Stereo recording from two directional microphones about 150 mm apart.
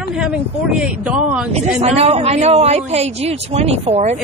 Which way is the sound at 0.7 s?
10° right (ahead or behind).